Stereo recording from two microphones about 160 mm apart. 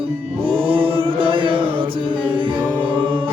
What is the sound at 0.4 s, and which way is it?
Chant, 35° right (ahead or behind).